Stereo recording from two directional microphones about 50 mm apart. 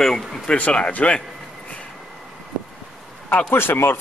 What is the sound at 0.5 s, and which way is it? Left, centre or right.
Speech, left.